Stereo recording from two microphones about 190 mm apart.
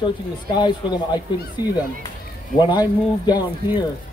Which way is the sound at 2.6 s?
20° left (ahead or behind).